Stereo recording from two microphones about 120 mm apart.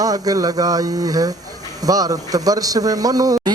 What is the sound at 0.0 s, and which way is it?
A man's voice, 30° right (ahead or behind).